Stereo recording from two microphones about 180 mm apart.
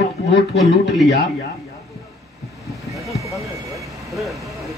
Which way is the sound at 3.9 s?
Centre (ahead or behind).